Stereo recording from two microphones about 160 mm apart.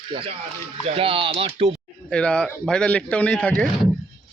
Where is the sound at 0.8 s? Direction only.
35° right (ahead or behind).